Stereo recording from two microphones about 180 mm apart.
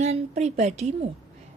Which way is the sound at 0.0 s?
40° right (ahead or behind).